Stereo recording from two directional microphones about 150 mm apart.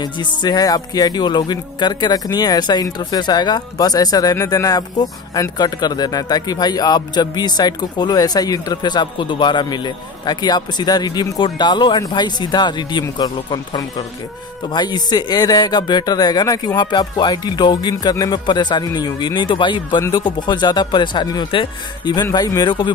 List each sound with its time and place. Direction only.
0.0 s speech: 30° left (ahead or behind)